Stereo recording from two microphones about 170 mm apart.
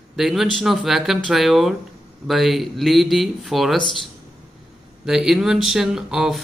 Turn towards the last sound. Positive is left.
turn(degrees=-5)  # may be behind; listen again after turning